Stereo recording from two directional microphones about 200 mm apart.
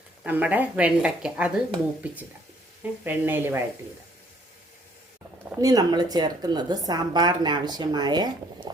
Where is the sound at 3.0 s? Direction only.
10° right (ahead or behind).